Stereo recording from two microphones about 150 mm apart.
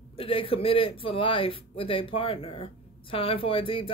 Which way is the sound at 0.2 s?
40° left (ahead or behind).